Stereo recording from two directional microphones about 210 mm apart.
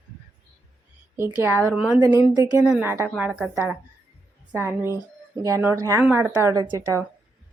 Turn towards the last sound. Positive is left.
turn(degrees=-15)  # may be behind; listen again after turning